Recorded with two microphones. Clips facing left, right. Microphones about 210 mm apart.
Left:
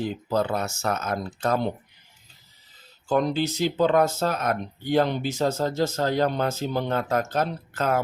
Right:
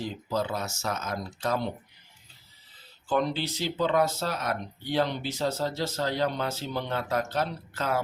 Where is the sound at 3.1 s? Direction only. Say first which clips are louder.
Left 4 dB; 45° left (ahead or behind).